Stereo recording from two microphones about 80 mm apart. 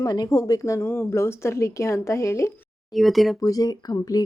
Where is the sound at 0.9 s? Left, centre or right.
Left.